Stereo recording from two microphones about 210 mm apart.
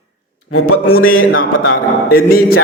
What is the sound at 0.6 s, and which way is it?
A man's voice, 75° left (ahead or behind).